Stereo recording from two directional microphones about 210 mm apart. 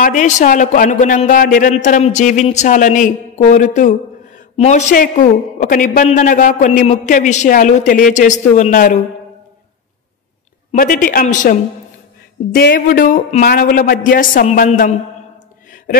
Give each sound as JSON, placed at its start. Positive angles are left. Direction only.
{"t": 0.0, "sound": "a man's voice", "side_deg": 40}
{"t": 10.7, "sound": "a man's voice", "side_deg": 40}
{"t": 12.5, "sound": "a man's voice", "side_deg": 45}
{"t": 15.9, "sound": "speech", "side_deg": 40}